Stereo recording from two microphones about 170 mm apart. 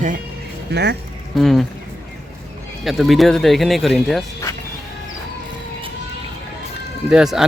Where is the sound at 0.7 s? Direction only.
80° right.